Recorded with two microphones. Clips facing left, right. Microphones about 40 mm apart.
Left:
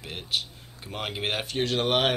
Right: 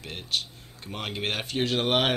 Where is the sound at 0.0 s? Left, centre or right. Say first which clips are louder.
Even; centre.